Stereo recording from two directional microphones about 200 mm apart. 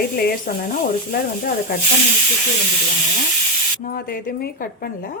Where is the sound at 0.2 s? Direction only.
50° left (ahead or behind).